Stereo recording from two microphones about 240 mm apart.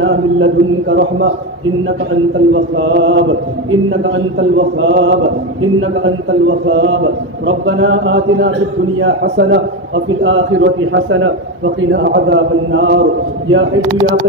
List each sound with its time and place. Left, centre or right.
0.0 s a man's voice: right
2.5 s a man's voice: right